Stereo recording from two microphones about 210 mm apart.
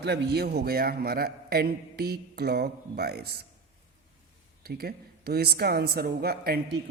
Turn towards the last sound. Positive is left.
turn(degrees=-45)  # may be behind; listen again after turning